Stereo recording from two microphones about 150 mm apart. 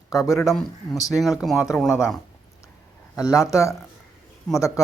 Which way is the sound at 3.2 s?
20° left (ahead or behind).